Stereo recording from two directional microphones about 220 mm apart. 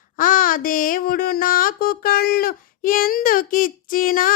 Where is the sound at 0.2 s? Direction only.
40° left (ahead or behind).